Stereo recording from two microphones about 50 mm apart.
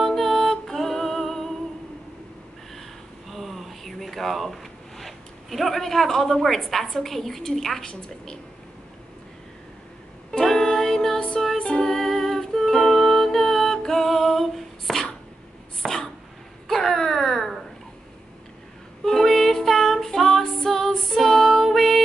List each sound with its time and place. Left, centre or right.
0.0 s music: centre
3.3 s a sound: centre
7.8 s a woman's voice: centre
10.3 s music: centre
15.8 s a sound: centre
19.0 s music: centre